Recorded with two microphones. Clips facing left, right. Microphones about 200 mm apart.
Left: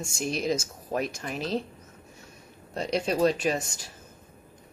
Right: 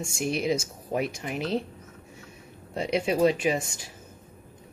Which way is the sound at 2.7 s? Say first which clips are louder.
Right 1 dB; 10° right (ahead or behind).